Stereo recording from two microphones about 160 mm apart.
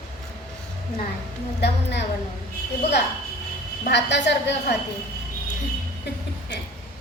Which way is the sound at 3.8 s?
90° left.